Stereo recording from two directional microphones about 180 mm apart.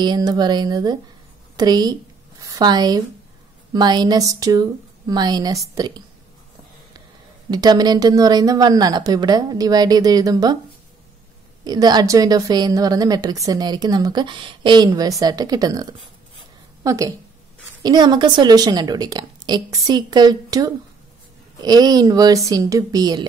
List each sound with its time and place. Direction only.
0.0 s a woman's voice: 25° right (ahead or behind)
7.5 s a woman's voice: 20° right (ahead or behind)
11.6 s a woman's voice: 25° right (ahead or behind)